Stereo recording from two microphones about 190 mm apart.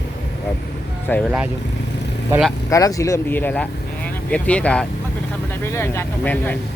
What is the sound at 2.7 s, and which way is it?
Speech, 15° left (ahead or behind).